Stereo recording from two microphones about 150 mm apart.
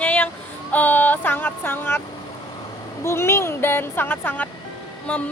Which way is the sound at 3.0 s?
15° left (ahead or behind).